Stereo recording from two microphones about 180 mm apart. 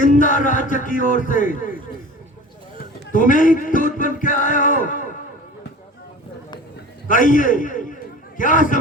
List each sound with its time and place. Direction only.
0.0 s speech: 45° left (ahead or behind)
3.1 s speech: 50° left (ahead or behind)
7.1 s speech: 45° left (ahead or behind)